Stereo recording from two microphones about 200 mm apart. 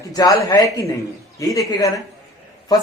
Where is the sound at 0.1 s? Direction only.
15° left (ahead or behind).